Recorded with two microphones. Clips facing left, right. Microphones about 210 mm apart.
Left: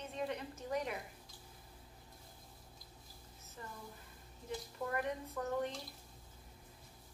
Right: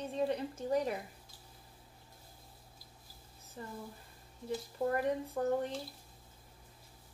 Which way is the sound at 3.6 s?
35° right (ahead or behind).